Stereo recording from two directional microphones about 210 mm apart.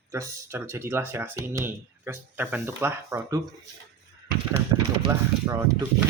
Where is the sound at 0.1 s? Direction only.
10° right (ahead or behind).